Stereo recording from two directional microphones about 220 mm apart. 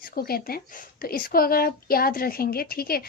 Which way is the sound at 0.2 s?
45° left (ahead or behind).